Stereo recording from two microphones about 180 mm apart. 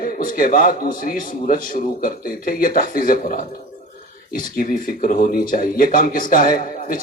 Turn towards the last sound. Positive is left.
turn(degrees=50)  # may be behind; listen again after turning